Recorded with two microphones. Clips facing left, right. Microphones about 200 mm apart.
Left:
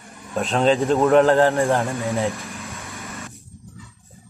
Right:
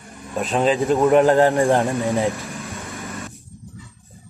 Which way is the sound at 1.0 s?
15° right (ahead or behind).